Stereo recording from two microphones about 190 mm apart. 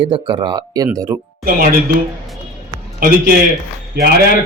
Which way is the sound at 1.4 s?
50° right (ahead or behind).